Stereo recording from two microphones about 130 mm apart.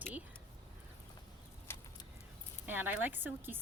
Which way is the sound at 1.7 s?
20° left (ahead or behind).